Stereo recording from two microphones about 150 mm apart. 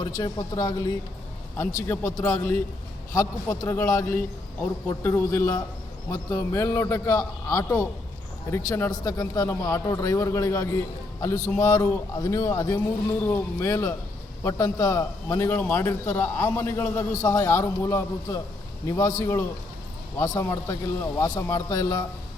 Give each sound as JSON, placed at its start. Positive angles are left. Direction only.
{"t": 0.0, "sound": "a man's voice", "side_deg": 25}